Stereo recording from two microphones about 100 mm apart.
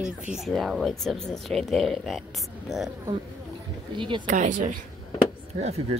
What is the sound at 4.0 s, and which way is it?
Speech, 55° right (ahead or behind).